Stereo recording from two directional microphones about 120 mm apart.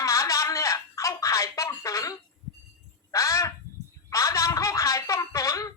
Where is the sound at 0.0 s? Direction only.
25° left (ahead or behind).